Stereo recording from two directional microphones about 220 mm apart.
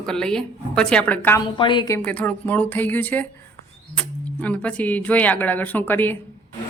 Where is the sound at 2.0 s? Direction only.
5° left (ahead or behind).